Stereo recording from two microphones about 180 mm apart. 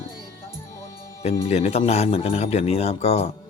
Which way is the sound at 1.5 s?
35° left (ahead or behind).